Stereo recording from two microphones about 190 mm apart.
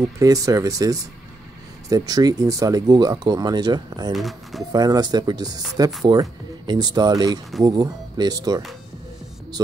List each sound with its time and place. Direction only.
0.0 s speech: 15° right (ahead or behind)
4.1 s speech: centre (ahead or behind)
4.7 s speech: 20° right (ahead or behind)